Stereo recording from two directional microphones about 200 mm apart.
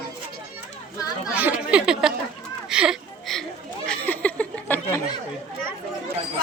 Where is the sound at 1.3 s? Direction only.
5° right (ahead or behind).